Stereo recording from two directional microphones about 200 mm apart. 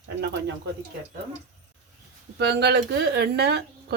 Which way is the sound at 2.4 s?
55° right (ahead or behind).